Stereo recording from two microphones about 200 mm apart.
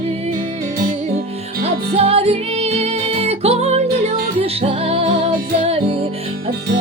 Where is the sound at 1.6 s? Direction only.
30° right (ahead or behind).